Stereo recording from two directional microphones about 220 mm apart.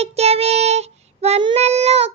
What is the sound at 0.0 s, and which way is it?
Child singing, 30° right (ahead or behind).